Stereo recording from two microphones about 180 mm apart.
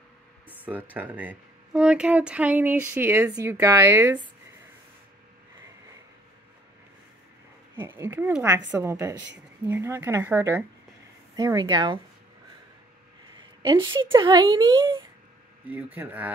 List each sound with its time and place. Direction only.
0.5 s music: 10° right (ahead or behind)
0.9 s speech: 10° right (ahead or behind)
7.7 s a woman's voice: 15° right (ahead or behind)
13.4 s a sound: 25° right (ahead or behind)
14.1 s a woman's voice: 25° right (ahead or behind)
15.7 s speech: 10° right (ahead or behind)